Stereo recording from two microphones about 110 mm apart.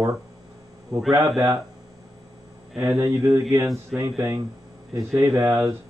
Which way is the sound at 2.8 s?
25° right (ahead or behind).